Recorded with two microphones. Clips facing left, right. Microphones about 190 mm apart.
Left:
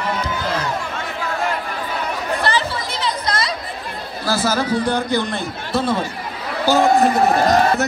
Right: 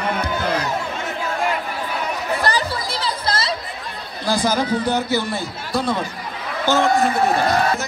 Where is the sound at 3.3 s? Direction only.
25° right (ahead or behind).